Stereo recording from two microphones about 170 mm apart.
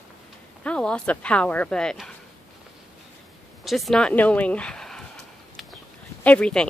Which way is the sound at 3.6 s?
Centre (ahead or behind).